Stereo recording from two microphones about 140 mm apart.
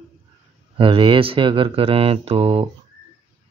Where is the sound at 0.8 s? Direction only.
35° right (ahead or behind).